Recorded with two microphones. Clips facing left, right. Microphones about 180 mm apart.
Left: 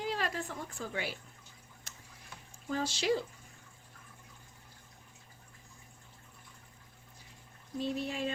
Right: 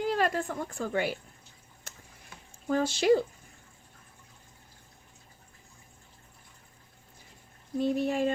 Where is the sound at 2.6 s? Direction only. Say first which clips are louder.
Right 8 dB; 55° right (ahead or behind).